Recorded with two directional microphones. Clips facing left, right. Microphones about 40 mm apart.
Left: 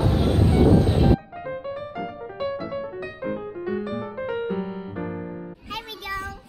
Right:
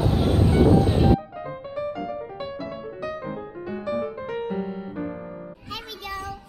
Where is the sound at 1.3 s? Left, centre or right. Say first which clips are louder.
Left 2 dB; centre.